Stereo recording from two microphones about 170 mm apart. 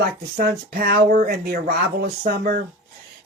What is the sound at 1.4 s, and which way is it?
Speech, 65° right (ahead or behind).